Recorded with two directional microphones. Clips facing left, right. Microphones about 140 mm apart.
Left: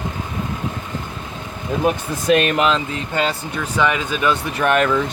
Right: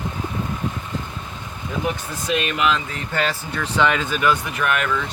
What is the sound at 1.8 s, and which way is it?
Speech, 55° left (ahead or behind).